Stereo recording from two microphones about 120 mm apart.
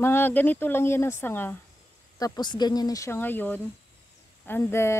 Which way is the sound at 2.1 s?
35° left (ahead or behind).